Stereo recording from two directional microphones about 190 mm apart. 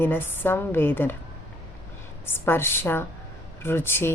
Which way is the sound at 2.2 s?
10° left (ahead or behind).